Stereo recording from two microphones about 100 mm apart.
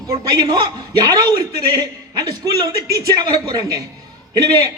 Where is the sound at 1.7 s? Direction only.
40° right (ahead or behind).